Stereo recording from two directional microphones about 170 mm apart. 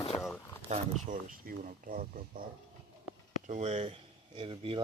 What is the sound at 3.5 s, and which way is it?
Speech, 40° right (ahead or behind).